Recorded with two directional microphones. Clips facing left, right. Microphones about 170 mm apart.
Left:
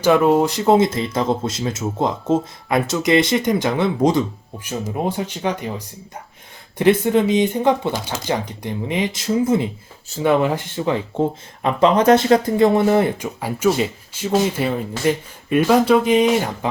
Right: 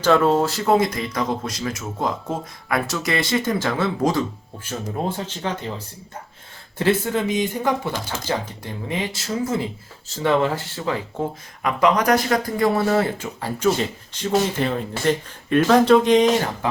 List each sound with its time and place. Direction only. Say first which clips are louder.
0.0 s speech: left 3 dB; 15° left (ahead or behind)